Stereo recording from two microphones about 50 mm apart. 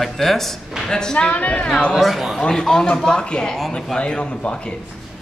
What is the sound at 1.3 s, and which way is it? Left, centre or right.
Speech, left.